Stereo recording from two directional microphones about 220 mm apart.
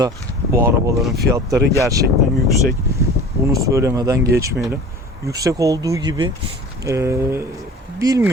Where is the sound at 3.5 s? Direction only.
15° right (ahead or behind).